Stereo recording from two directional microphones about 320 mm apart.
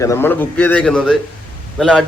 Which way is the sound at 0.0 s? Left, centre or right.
Centre.